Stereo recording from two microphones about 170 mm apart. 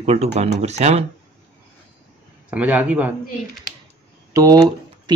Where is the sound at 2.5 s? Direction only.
10° right (ahead or behind).